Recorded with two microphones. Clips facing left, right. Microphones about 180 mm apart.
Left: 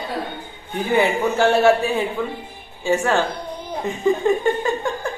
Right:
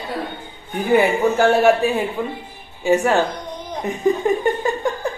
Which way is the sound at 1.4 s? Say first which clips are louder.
Even; 15° right (ahead or behind).